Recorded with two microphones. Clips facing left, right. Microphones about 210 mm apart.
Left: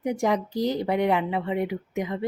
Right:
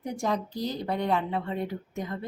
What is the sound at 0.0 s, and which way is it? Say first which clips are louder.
Speech: left 5 dB; 15° left (ahead or behind).